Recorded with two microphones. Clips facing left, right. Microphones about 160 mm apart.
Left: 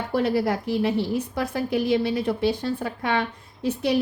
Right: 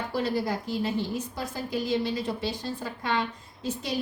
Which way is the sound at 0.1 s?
60° left (ahead or behind).